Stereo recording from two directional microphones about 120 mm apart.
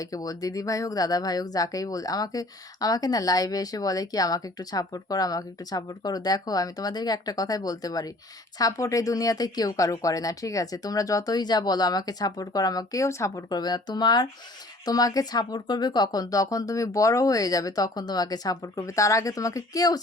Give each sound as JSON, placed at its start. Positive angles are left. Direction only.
{"t": 0.0, "sound": "speech", "side_deg": 30}